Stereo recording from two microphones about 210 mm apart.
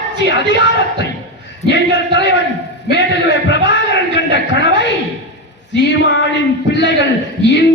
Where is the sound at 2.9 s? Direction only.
55° left (ahead or behind).